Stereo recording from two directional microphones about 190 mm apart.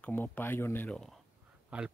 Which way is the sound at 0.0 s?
10° left (ahead or behind).